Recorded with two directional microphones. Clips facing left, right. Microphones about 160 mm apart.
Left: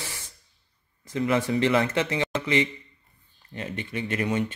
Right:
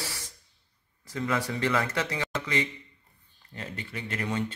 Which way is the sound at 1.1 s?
20° left (ahead or behind).